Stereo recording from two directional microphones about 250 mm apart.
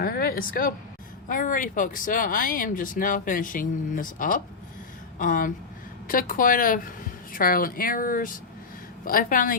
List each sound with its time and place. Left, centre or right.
0.0 s speech: left